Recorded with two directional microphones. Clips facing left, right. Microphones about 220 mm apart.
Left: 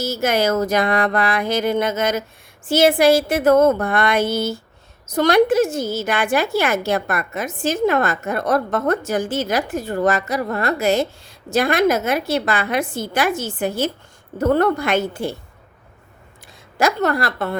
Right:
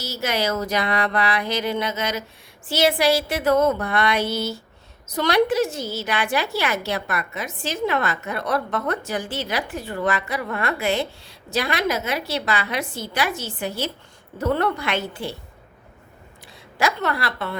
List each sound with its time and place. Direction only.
0.0 s a woman's voice: 50° left (ahead or behind)
16.7 s a woman's voice: 45° left (ahead or behind)